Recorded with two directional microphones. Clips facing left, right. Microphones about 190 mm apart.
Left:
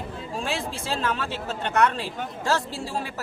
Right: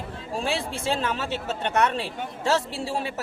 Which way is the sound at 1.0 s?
25° right (ahead or behind).